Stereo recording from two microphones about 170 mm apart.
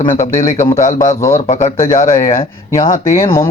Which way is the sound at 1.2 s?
15° left (ahead or behind).